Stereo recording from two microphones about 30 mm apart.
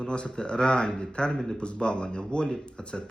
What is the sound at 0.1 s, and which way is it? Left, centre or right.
Speech, left.